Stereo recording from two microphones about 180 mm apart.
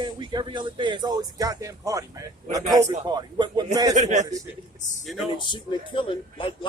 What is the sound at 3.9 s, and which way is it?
Speech, 40° right (ahead or behind).